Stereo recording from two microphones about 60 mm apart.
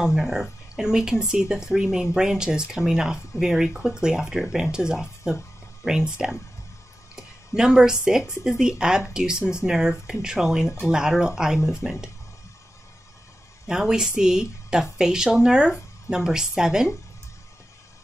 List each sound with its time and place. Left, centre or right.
0.0 s speech: centre
13.7 s speech: centre